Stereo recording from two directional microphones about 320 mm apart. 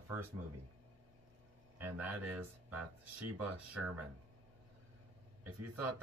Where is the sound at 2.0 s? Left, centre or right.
Right.